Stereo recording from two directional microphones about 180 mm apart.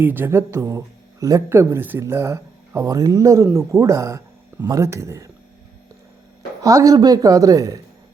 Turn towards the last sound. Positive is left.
turn(degrees=-20)  # may be behind; listen again after turning